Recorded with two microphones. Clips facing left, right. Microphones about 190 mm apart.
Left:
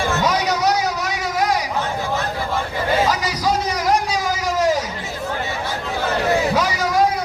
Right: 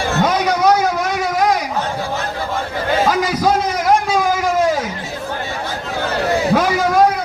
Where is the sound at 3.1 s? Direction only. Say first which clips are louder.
Right 5 dB; 55° right (ahead or behind).